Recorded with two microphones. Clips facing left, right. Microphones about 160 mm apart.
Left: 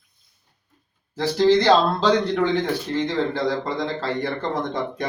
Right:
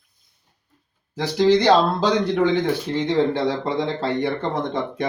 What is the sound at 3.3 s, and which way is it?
Speech, 25° right (ahead or behind).